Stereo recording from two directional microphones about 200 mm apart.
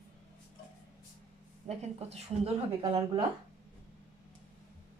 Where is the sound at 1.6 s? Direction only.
30° right (ahead or behind).